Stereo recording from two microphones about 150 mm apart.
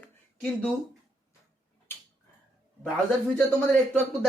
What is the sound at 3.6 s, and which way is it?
Speech, 10° left (ahead or behind).